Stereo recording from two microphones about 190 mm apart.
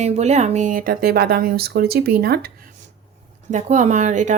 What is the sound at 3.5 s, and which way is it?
Speech, 40° right (ahead or behind).